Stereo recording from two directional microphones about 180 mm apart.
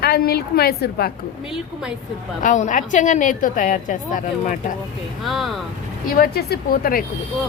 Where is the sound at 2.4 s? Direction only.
45° left (ahead or behind).